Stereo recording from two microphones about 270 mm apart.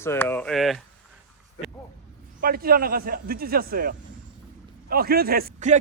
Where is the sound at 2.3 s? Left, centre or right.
Right.